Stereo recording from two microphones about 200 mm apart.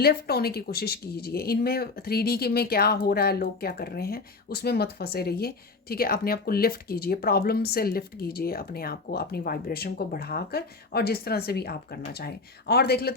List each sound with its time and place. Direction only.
0.0 s speech: 50° left (ahead or behind)